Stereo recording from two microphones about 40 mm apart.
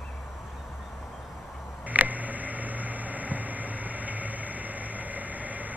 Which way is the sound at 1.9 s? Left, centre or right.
Right.